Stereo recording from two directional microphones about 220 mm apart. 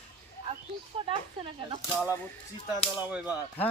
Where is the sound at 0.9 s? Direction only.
25° right (ahead or behind).